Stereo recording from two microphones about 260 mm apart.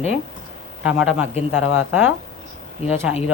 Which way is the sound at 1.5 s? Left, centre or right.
Left.